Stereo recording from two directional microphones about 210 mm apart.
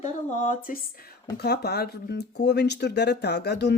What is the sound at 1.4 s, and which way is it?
Speech, 50° left (ahead or behind).